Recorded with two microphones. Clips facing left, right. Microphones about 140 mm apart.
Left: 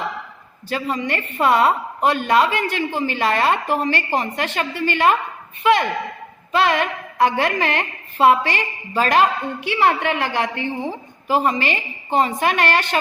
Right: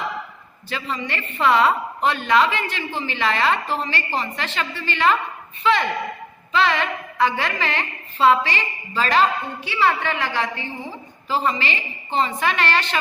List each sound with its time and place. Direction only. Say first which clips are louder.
0.7 s a woman's voice: left 5 dB; 45° left (ahead or behind)
6.5 s a woman's voice: left 2 dB; 50° left (ahead or behind)